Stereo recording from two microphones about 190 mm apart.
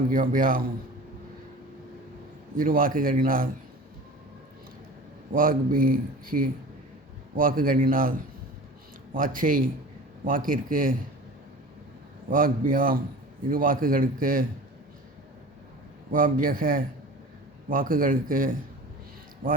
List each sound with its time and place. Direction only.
0.1 s speech: 45° right (ahead or behind)
2.6 s speech: 45° right (ahead or behind)
5.3 s speech: 45° right (ahead or behind)
9.1 s speech: 45° right (ahead or behind)
12.3 s speech: 45° right (ahead or behind)
16.1 s speech: 45° right (ahead or behind)